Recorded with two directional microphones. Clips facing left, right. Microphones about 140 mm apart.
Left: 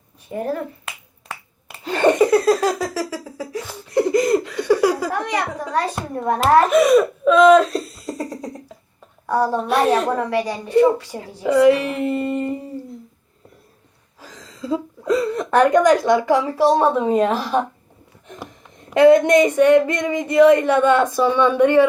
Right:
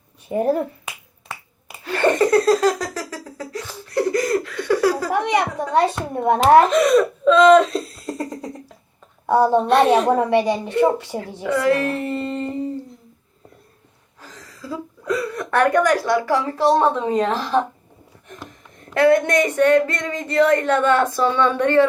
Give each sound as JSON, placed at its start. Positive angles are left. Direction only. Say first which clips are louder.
{"t": 0.3, "sound": "a child's voice", "louder": "right 5 dB", "side_deg": -20}
{"t": 1.8, "sound": "a sound", "louder": "left 2 dB", "side_deg": 20}
{"t": 5.1, "sound": "a child's voice", "louder": "right 3 dB", "side_deg": -25}
{"t": 6.7, "sound": "speech", "louder": "left 2 dB", "side_deg": 10}
{"t": 9.2, "sound": "a child's voice", "louder": "right 4 dB", "side_deg": -25}
{"t": 9.6, "sound": "a woman's voice", "louder": "right 2 dB", "side_deg": 0}
{"t": 10.1, "sound": "a child's voice", "louder": "right 4 dB", "side_deg": -25}
{"t": 11.4, "sound": "speech", "louder": "left 5 dB", "side_deg": 20}
{"t": 14.2, "sound": "a woman's voice", "louder": "left 5 dB", "side_deg": 15}
{"t": 18.9, "sound": "speech", "louder": "left 4 dB", "side_deg": 15}